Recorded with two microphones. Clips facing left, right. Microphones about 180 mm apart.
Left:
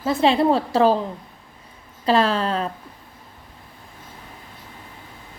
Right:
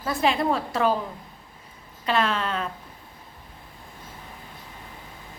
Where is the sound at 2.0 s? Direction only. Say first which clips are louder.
Left 6 dB; 35° left (ahead or behind).